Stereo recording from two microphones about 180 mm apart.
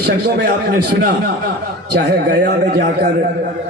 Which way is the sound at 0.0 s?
65° right (ahead or behind).